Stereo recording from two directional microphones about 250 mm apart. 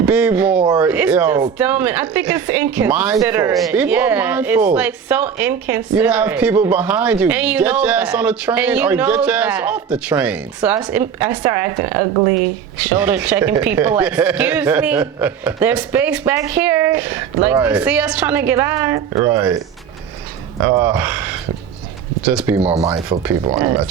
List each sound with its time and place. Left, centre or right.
0.0 s a sound: centre
1.5 s a woman's voice: centre
20.7 s a woman's voice: centre
23.4 s speech: right
23.6 s a woman's voice: centre